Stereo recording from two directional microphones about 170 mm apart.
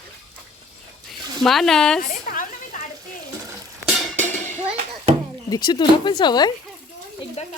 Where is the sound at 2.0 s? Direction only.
60° left (ahead or behind).